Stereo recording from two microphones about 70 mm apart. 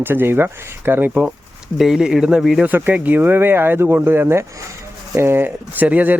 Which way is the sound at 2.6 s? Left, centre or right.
Right.